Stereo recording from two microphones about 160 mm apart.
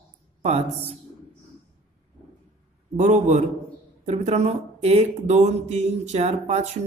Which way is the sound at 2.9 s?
50° right (ahead or behind).